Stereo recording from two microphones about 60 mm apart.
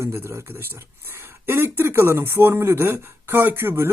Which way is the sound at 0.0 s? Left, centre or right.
Right.